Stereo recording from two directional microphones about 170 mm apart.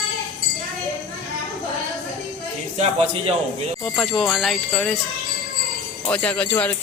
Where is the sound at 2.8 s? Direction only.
35° right (ahead or behind).